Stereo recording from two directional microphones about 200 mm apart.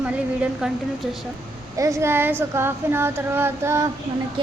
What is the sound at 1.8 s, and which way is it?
A woman's voice, 15° right (ahead or behind).